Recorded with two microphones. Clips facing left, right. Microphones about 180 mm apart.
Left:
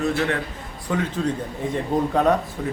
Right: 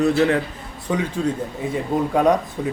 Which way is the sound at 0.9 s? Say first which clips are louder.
Right 2 dB; 10° right (ahead or behind).